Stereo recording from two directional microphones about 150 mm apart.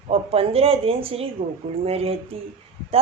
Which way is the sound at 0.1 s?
40° right (ahead or behind).